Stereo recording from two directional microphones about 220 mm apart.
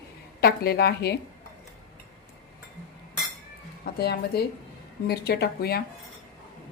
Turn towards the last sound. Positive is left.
turn(degrees=45)  # may be behind; listen again after turning